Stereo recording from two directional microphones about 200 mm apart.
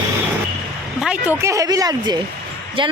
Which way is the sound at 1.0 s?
5° right (ahead or behind).